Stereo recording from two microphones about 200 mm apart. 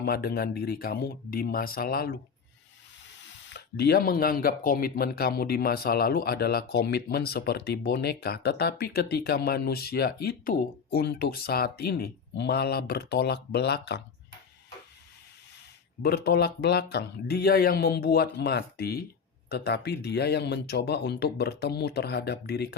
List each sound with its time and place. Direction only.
0.0 s speech: 50° left (ahead or behind)
3.2 s speech: 60° left (ahead or behind)
16.0 s speech: 50° left (ahead or behind)